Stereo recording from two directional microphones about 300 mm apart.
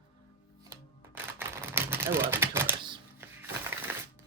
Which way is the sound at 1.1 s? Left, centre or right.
Centre.